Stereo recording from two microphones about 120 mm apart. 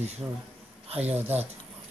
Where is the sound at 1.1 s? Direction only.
15° right (ahead or behind).